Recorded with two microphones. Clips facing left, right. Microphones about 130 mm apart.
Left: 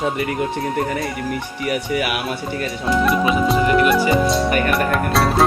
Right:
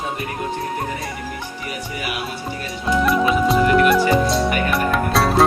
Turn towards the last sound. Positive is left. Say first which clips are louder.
# even
turn(degrees=0)  # may be behind; listen again after turning